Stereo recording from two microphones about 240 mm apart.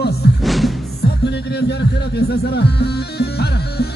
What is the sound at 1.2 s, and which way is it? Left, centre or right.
Music, left.